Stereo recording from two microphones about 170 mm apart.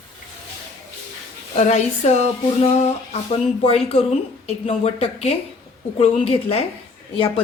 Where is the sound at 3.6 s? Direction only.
35° left (ahead or behind).